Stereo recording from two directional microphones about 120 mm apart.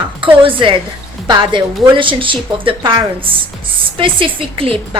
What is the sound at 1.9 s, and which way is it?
A woman's voice, 45° right (ahead or behind).